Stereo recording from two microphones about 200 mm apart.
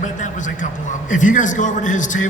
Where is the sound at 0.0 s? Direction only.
40° left (ahead or behind).